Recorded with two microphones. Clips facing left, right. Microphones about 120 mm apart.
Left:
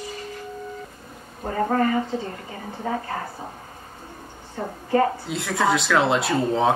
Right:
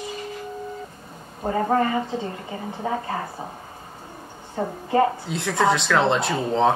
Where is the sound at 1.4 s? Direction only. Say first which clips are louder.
Right 1 dB; 15° right (ahead or behind).